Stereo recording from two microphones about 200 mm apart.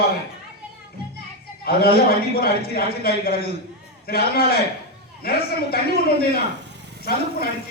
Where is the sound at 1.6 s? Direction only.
50° left (ahead or behind).